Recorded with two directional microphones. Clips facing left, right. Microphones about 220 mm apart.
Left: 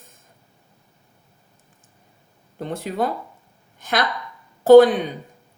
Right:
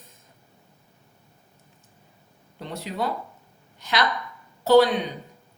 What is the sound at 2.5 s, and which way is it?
Speech, 50° left (ahead or behind).